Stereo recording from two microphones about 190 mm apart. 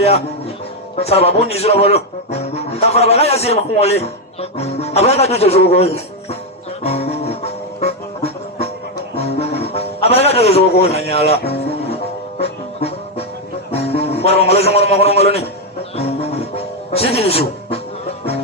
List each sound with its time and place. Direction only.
0.9 s speech: 30° left (ahead or behind)
6.8 s music: 35° left (ahead or behind)
12.4 s music: 30° left (ahead or behind)
13.7 s a man's voice: 35° left (ahead or behind)
16.0 s music: 35° left (ahead or behind)